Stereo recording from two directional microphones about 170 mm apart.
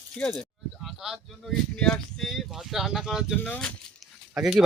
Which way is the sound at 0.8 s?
Centre (ahead or behind).